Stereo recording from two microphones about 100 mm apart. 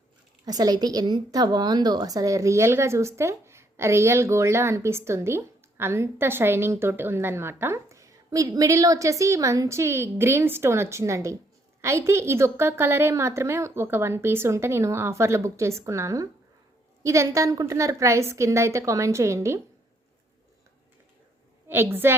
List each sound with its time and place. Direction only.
0.4 s a woman's voice: 40° right (ahead or behind)
21.7 s a woman's voice: 20° right (ahead or behind)